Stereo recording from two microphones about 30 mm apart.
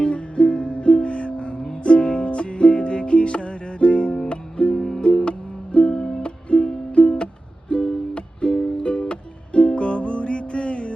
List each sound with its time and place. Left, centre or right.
0.0 s music: left
5.9 s music: left
6.2 s music: left